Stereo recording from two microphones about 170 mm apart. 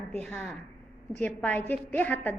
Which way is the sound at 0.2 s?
10° left (ahead or behind).